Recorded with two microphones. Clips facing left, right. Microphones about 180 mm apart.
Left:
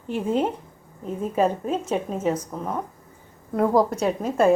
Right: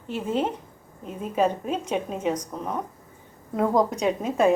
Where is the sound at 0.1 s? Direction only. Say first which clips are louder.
Left 3 dB; 10° left (ahead or behind).